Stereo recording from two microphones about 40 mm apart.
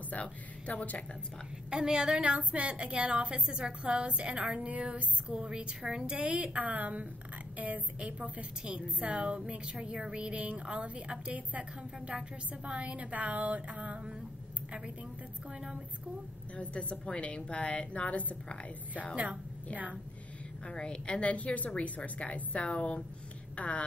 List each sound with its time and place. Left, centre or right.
0.1 s speech: left
1.7 s a woman's voice: right
4.6 s a woman's voice: right
6.1 s a woman's voice: right
8.4 s a woman's voice: right
10.3 s a woman's voice: right
16.5 s a woman's voice: left
18.0 s a woman's voice: left
20.6 s a woman's voice: left